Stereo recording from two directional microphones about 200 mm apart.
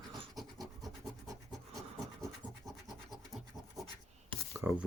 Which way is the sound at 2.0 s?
15° right (ahead or behind).